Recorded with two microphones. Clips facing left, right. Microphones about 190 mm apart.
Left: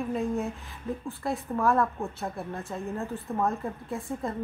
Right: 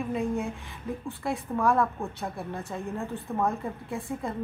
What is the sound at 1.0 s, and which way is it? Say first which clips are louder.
A woman's voice: right 1 dB; centre (ahead or behind).